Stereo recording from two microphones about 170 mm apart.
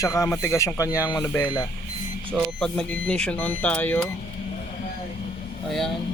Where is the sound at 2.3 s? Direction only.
5° left (ahead or behind).